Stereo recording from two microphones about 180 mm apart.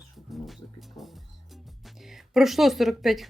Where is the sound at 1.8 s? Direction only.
Centre (ahead or behind).